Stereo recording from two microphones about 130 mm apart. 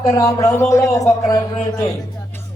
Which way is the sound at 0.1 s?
25° left (ahead or behind).